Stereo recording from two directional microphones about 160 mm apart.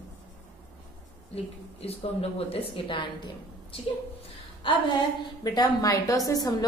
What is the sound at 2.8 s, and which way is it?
Speech, 30° left (ahead or behind).